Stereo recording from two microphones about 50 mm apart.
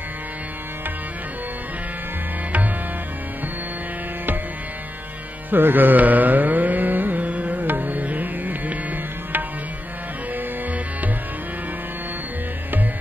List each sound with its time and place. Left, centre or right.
5.5 s carnatic music: right
10.3 s music: right